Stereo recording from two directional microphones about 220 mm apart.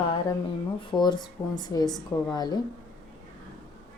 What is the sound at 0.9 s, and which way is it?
Speech, 20° left (ahead or behind).